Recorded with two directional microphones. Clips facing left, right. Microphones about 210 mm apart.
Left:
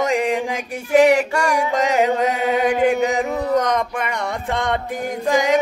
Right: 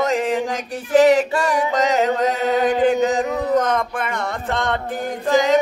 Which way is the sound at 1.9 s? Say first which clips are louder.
Left 1 dB; 15° left (ahead or behind).